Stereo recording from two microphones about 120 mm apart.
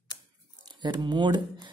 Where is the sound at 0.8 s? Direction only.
40° right (ahead or behind).